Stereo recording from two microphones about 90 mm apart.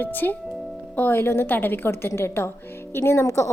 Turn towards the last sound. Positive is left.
turn(degrees=35)  # may be behind; listen again after turning